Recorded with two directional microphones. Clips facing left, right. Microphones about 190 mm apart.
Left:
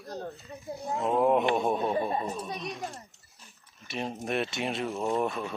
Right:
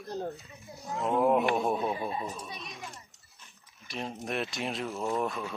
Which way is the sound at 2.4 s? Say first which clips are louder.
Left 7 dB; 35° left (ahead or behind).